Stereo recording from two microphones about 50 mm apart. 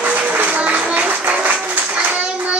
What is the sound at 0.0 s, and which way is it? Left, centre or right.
Music, right.